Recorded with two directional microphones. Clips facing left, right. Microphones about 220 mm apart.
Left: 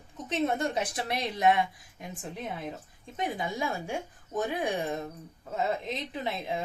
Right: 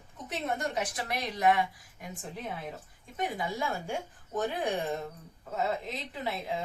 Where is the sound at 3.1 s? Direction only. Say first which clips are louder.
Left 1 dB; 20° left (ahead or behind).